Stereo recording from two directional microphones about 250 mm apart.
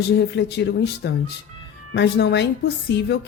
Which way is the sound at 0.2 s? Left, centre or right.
Left.